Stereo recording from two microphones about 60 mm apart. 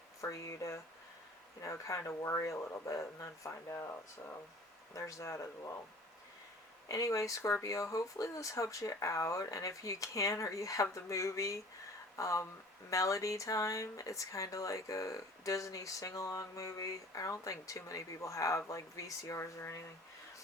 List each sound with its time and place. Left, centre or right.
0.2 s speech: left
2.0 s speech: left
4.9 s speech: left
6.8 s speech: left